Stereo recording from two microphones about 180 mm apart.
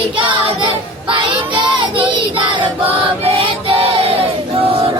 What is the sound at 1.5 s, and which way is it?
Child singing, 25° right (ahead or behind).